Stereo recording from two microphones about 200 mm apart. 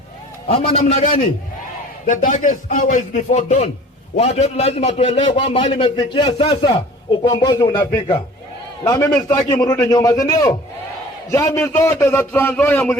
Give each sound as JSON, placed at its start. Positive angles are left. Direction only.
{"t": 0.4, "sound": "a man's voice", "side_deg": 30}
{"t": 2.0, "sound": "a man's voice", "side_deg": 40}